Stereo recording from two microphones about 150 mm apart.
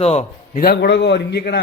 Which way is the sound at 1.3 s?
90° left.